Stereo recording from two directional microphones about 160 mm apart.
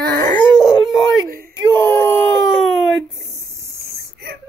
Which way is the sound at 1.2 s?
65° right (ahead or behind).